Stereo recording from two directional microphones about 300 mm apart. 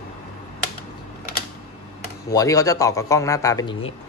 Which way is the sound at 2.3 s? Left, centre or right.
Centre.